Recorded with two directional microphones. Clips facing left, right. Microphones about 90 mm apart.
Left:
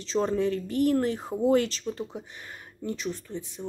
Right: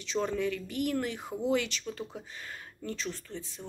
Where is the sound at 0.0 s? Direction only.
35° left (ahead or behind).